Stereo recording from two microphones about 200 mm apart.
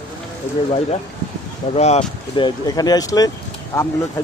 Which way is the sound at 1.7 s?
35° left (ahead or behind).